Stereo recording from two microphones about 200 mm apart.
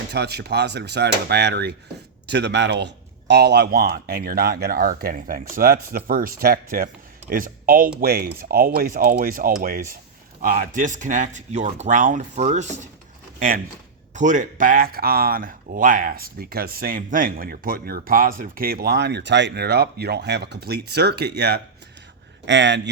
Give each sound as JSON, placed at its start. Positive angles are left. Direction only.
{"t": 0.1, "sound": "a man's voice", "side_deg": -55}
{"t": 14.2, "sound": "a man's voice", "side_deg": -40}